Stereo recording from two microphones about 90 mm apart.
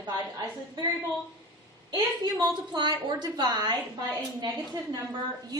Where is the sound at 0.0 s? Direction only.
50° right (ahead or behind).